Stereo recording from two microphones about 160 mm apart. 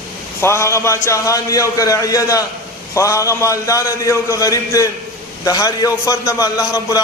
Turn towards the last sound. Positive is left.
turn(degrees=20)  # may be behind; listen again after turning